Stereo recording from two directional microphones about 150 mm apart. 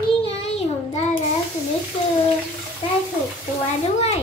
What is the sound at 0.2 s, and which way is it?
Child singing, 45° left (ahead or behind).